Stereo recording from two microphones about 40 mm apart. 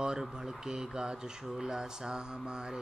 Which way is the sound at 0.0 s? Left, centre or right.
Centre.